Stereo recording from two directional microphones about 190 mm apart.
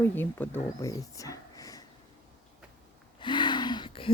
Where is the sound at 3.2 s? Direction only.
25° left (ahead or behind).